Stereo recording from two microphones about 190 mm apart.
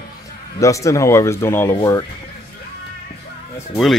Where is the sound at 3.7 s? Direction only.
Centre (ahead or behind).